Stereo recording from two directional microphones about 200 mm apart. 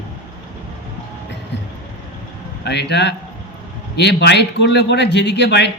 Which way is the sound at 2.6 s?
55° left (ahead or behind).